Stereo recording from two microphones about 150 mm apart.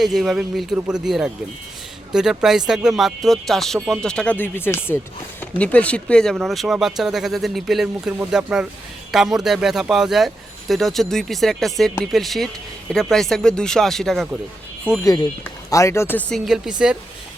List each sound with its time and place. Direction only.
0.0 s speech: centre (ahead or behind)
15.0 s speech: 25° left (ahead or behind)
16.3 s speech: 5° right (ahead or behind)